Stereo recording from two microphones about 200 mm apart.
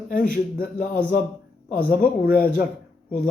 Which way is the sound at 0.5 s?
45° left (ahead or behind).